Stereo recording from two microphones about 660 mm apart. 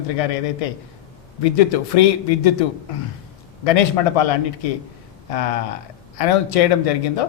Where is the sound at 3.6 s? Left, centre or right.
Left.